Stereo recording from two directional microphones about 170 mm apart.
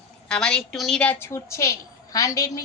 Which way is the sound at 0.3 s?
5° left (ahead or behind).